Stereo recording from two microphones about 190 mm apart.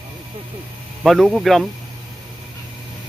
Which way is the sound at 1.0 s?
Centre (ahead or behind).